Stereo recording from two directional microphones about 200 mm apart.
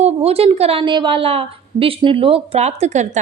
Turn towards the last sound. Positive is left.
turn(degrees=-35)  # may be behind; listen again after turning